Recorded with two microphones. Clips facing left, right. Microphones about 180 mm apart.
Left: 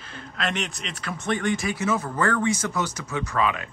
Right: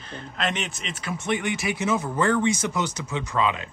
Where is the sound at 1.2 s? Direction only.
15° right (ahead or behind).